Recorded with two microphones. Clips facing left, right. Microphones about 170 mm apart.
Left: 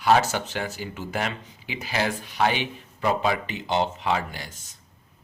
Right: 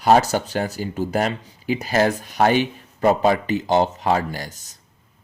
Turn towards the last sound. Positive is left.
turn(degrees=-40)  # may be behind; listen again after turning